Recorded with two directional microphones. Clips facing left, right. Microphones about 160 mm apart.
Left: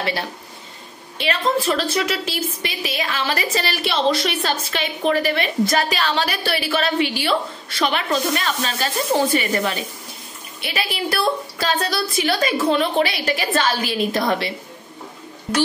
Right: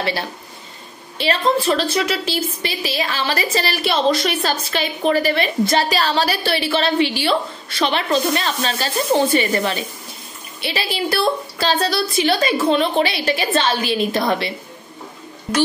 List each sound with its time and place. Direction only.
1.1 s a woman's voice: 35° right (ahead or behind)
10.6 s a woman's voice: 30° right (ahead or behind)